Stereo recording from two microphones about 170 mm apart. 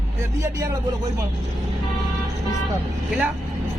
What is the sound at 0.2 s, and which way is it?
Speech, 15° right (ahead or behind).